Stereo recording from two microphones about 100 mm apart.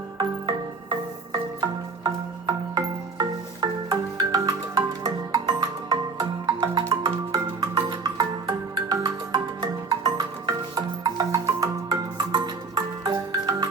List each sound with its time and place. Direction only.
0.2 s music: 45° right (ahead or behind)